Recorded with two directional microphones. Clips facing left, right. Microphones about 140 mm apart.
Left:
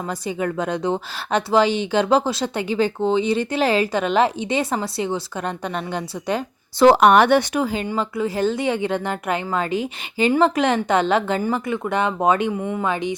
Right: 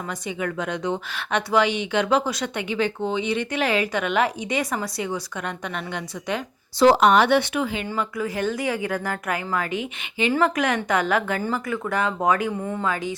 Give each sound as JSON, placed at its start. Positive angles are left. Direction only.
{"t": 0.1, "sound": "a woman's voice", "side_deg": 35}
{"t": 6.7, "sound": "a woman's voice", "side_deg": 60}